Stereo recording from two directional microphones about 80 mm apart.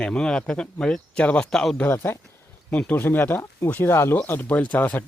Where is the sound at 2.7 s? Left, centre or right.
Centre.